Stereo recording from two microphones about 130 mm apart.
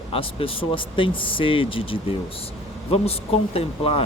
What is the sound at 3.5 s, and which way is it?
Speech, 50° left (ahead or behind).